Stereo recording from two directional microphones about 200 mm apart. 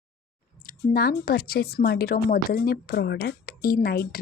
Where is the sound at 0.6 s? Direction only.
50° left (ahead or behind).